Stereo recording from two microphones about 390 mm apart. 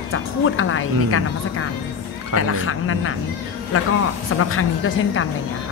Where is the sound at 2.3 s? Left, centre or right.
Left.